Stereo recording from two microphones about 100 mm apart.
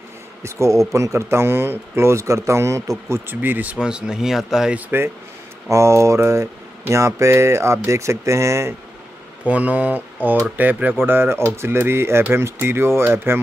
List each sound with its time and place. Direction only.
0.4 s speech: 30° right (ahead or behind)
3.3 s speech: 15° right (ahead or behind)
4.7 s speech: 20° right (ahead or behind)
9.5 s speech: 15° right (ahead or behind)